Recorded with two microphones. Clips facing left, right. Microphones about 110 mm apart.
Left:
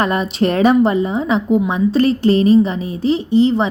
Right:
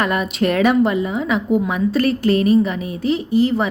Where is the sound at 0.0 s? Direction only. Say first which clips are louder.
Left 2 dB; 30° left (ahead or behind).